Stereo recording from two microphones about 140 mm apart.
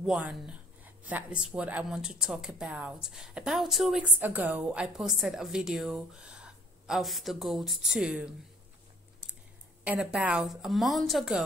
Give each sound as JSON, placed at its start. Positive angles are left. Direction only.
{"t": 0.0, "sound": "a woman's voice", "side_deg": -5}
{"t": 4.2, "sound": "a woman's voice", "side_deg": -15}
{"t": 9.8, "sound": "a woman's voice", "side_deg": -5}